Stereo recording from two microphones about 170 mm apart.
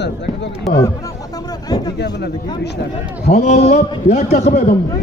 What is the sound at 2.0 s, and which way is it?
Speech, 75° left (ahead or behind).